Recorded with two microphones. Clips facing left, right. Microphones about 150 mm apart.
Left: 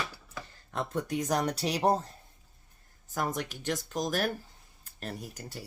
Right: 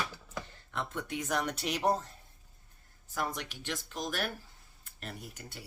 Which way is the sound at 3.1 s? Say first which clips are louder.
Left 4 dB; 45° left (ahead or behind).